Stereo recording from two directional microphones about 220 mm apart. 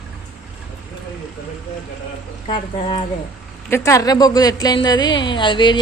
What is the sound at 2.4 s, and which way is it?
Speech, 25° left (ahead or behind).